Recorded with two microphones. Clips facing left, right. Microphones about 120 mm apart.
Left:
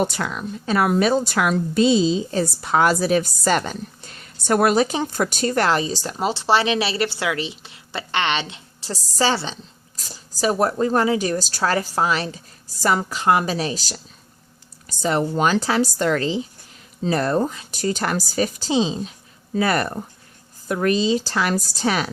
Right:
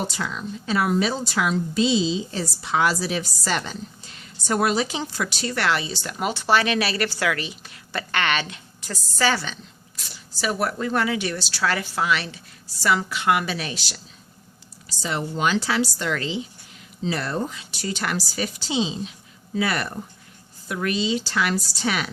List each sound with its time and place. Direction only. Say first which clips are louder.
0.0 s a woman's voice: left 5 dB; 60° left (ahead or behind); by 22.1 s 40° left (ahead or behind)